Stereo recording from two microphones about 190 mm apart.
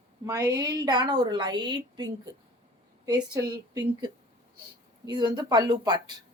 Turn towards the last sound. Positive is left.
turn(degrees=-20)  # may be behind; listen again after turning